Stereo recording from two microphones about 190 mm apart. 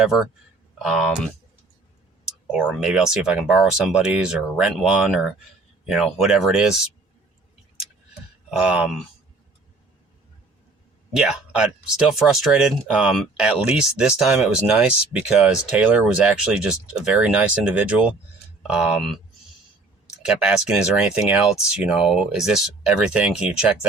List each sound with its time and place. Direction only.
0.8 s speech: centre (ahead or behind)
2.5 s speech: 5° right (ahead or behind)
8.4 s speech: 5° right (ahead or behind)
11.1 s speech: 5° right (ahead or behind)
20.2 s speech: 5° right (ahead or behind)